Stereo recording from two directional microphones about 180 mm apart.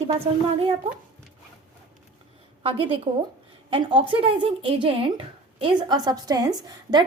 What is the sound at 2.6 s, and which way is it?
A woman's voice, 30° right (ahead or behind).